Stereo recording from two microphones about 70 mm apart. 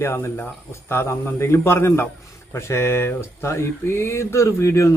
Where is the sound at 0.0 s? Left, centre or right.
Left.